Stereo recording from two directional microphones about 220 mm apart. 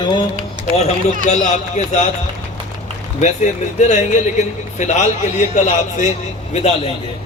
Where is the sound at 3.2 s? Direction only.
35° left (ahead or behind).